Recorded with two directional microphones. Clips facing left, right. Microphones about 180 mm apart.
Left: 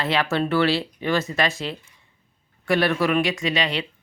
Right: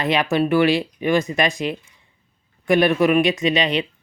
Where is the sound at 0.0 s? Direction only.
15° right (ahead or behind).